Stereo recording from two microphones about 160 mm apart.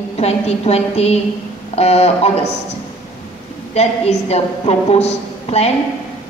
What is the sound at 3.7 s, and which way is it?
A man's voice, 40° left (ahead or behind).